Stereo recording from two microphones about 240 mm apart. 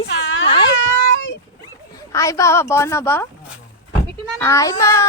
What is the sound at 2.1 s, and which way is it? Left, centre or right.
A woman's voice, centre.